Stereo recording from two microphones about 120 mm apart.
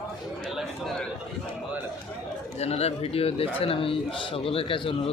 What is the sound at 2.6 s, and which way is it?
A man's voice, 60° left (ahead or behind).